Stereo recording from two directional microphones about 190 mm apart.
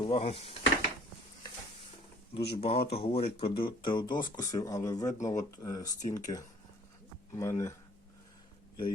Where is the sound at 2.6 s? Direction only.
30° left (ahead or behind).